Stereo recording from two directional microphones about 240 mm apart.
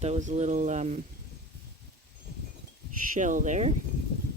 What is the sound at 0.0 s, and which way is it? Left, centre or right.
Speech, right.